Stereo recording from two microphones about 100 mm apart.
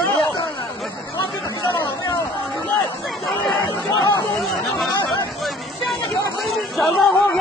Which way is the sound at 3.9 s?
30° left (ahead or behind).